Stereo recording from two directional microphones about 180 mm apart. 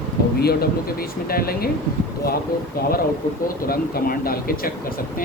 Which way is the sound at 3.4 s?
55° left (ahead or behind).